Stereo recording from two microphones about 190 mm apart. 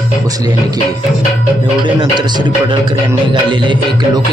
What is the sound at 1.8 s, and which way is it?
Speech, 25° right (ahead or behind).